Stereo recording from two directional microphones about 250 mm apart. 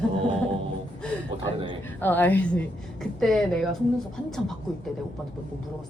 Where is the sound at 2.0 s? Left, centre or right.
Centre.